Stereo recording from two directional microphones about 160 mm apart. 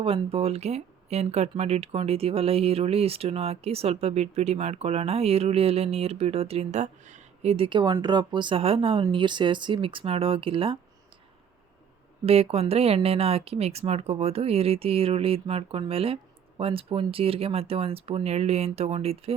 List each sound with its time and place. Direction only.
0.0 s speech: 35° right (ahead or behind)
12.2 s speech: 40° right (ahead or behind)